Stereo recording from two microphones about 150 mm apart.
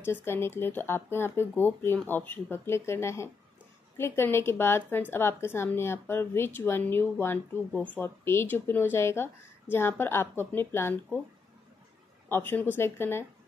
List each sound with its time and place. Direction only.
0.0 s a woman's voice: 15° left (ahead or behind)
12.3 s a woman's voice: 15° left (ahead or behind)